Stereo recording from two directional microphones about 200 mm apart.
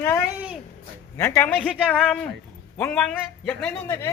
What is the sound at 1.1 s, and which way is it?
A man's voice, 10° left (ahead or behind).